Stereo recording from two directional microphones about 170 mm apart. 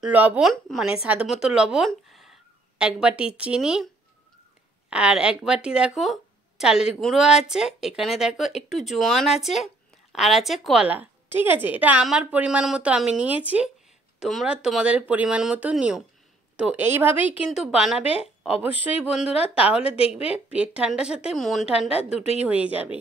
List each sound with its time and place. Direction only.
0.0 s a woman's voice: 10° right (ahead or behind)
19.3 s a woman's voice: 35° left (ahead or behind)
20.3 s speech: 5° right (ahead or behind)
21.9 s a woman's voice: 35° left (ahead or behind)
22.4 s a woman's voice: 10° right (ahead or behind)